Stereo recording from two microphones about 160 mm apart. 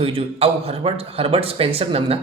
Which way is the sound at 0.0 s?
35° right (ahead or behind).